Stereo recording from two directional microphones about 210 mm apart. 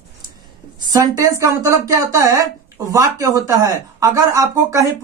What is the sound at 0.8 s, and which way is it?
Speech, 15° right (ahead or behind).